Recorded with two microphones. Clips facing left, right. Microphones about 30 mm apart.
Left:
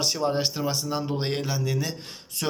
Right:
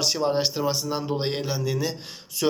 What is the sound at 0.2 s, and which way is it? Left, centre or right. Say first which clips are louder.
Speech: right 2 dB; right.